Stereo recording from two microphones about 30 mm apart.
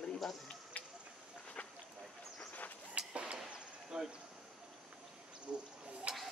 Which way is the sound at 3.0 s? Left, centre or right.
Right.